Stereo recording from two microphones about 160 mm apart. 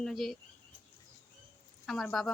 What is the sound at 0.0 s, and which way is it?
Speech, centre (ahead or behind).